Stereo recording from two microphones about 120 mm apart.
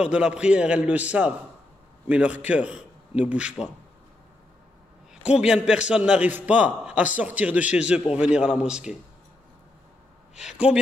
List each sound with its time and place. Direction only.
0.0 s a man's voice: 10° right (ahead or behind)
5.1 s a man's voice: 5° right (ahead or behind)
10.3 s speech: 5° right (ahead or behind)